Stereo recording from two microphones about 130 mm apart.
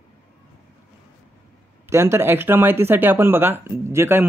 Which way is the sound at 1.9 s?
20° right (ahead or behind).